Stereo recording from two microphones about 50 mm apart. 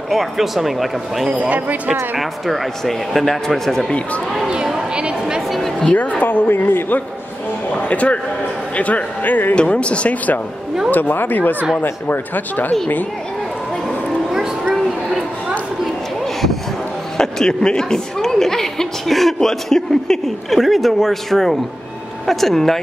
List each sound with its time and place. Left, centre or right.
0.1 s speech: centre
1.3 s speech: right
2.1 s speech: centre
4.7 s a sound: right
5.2 s a woman's voice: centre
5.9 s a woman's voice: left
7.7 s a woman's voice: left
9.6 s speech: left
10.9 s a woman's voice: left
17.2 s a woman's voice: centre